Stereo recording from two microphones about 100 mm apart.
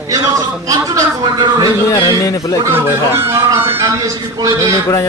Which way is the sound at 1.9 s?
40° left (ahead or behind).